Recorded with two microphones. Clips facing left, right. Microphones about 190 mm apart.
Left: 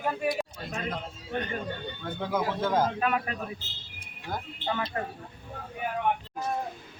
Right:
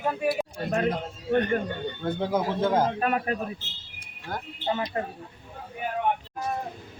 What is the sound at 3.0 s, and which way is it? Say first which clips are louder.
Speech: right 3 dB; 45° right (ahead or behind).